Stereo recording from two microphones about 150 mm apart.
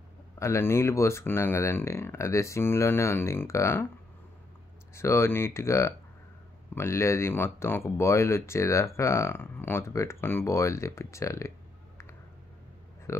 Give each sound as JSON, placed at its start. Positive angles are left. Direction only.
{"t": 0.4, "sound": "speech", "side_deg": 20}
{"t": 4.9, "sound": "speech", "side_deg": 20}